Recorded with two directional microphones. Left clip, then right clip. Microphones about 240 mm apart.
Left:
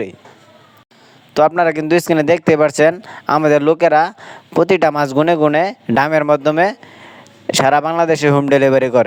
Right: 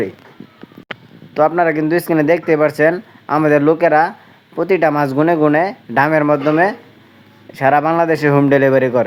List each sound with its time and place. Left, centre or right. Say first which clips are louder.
1.4 s speech: left 1 dB; left